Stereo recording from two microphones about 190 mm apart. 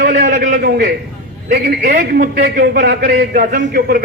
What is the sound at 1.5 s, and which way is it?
A man's voice, 50° right (ahead or behind).